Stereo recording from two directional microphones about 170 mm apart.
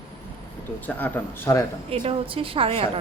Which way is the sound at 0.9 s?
10° left (ahead or behind).